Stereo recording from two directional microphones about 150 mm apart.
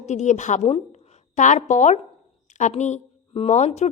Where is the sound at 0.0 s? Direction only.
50° left (ahead or behind).